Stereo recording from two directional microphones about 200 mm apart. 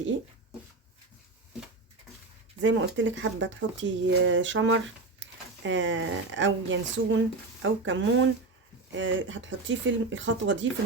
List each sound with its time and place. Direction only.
2.6 s speech: 65° right (ahead or behind)